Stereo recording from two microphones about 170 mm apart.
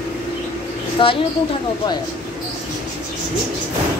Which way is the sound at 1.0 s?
30° left (ahead or behind).